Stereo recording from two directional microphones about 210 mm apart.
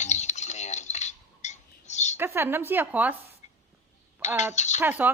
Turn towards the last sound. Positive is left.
turn(degrees=-10)  # may be behind; listen again after turning